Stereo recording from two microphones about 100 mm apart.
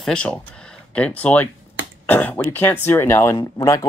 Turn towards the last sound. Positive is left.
turn(degrees=35)  # may be behind; listen again after turning